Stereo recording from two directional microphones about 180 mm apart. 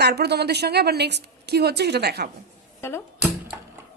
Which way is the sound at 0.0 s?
65° right (ahead or behind).